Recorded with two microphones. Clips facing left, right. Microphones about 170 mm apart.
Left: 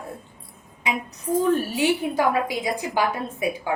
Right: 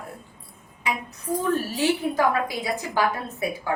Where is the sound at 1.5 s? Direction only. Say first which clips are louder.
Left 2 dB; 15° left (ahead or behind).